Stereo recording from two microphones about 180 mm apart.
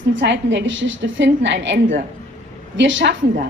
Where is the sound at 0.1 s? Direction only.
85° right.